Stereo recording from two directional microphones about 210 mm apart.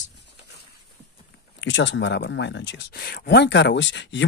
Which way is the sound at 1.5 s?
60° left (ahead or behind).